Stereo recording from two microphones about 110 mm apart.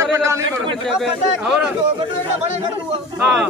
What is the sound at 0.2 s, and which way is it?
Speech, 25° right (ahead or behind).